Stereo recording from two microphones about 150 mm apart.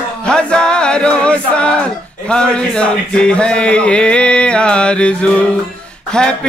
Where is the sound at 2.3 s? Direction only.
5° left (ahead or behind).